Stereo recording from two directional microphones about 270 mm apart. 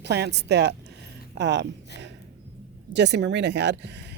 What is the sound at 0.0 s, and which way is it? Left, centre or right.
Speech, right.